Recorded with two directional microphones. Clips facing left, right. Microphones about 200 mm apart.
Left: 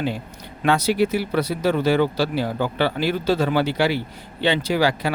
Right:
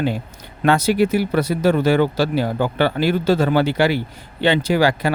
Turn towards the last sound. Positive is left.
turn(degrees=-50)  # may be behind; listen again after turning